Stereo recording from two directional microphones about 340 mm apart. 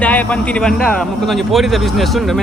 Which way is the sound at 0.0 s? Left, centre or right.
Centre.